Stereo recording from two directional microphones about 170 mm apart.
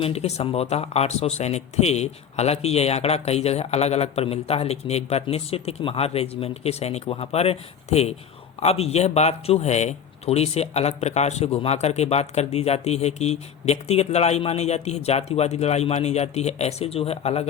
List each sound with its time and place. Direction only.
0.0 s speech: 35° left (ahead or behind)